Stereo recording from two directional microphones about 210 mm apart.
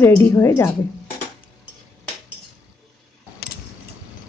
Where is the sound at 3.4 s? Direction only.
50° left (ahead or behind).